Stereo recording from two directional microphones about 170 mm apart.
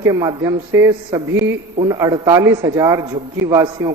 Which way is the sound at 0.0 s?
20° right (ahead or behind).